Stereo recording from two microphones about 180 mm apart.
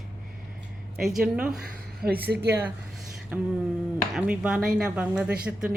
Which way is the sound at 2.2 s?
65° right (ahead or behind).